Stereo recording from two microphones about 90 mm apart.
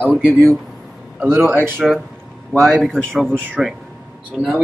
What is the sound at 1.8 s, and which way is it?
A man's voice, centre (ahead or behind).